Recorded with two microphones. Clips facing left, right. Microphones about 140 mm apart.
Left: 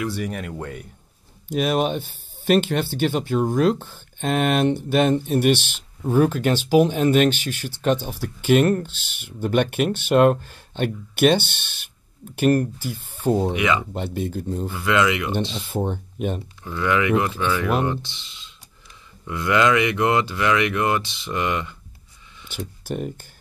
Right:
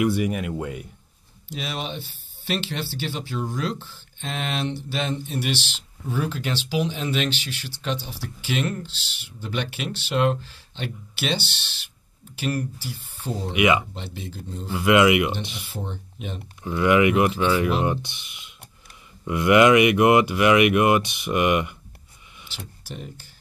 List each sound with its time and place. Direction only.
0.1 s speech: 5° right (ahead or behind)
1.5 s speech: 50° left (ahead or behind)
13.6 s speech: 15° right (ahead or behind)
13.9 s speech: 50° left (ahead or behind)
14.7 s speech: 20° right (ahead or behind)
15.7 s speech: 50° left (ahead or behind)
16.6 s speech: 15° right (ahead or behind)
22.5 s speech: 50° left (ahead or behind)